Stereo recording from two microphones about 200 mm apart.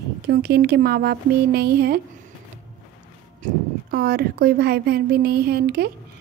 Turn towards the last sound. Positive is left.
turn(degrees=-50)  # may be behind; listen again after turning